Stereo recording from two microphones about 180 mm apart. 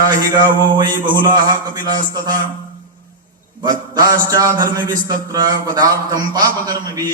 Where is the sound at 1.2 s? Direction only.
25° right (ahead or behind).